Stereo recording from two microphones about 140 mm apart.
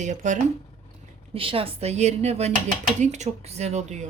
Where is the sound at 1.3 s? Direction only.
40° right (ahead or behind).